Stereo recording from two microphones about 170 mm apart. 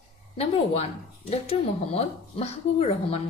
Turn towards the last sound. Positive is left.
turn(degrees=35)  # may be behind; listen again after turning